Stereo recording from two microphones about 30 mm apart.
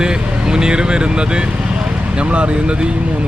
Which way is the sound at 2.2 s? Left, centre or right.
Right.